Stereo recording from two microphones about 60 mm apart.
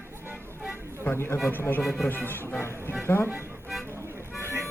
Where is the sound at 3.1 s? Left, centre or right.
Left.